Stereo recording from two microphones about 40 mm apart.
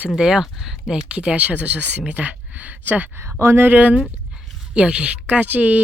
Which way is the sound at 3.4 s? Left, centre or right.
Right.